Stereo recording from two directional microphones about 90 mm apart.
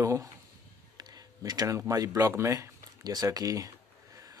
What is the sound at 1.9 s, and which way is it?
Speech, 40° right (ahead or behind).